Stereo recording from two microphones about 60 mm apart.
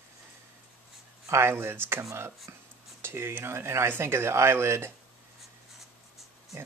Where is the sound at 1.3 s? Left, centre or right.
Right.